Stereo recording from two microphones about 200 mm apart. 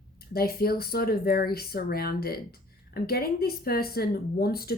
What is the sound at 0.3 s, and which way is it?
Speech, 50° left (ahead or behind).